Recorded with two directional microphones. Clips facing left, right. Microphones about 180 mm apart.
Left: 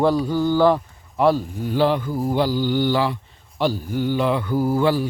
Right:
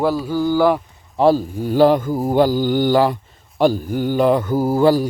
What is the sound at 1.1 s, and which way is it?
Mantra, 35° right (ahead or behind).